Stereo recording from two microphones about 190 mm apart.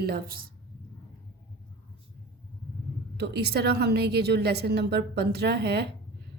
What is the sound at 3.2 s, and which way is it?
A woman's voice, 60° right (ahead or behind).